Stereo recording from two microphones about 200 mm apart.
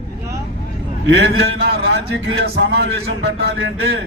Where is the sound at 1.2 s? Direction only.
55° right (ahead or behind).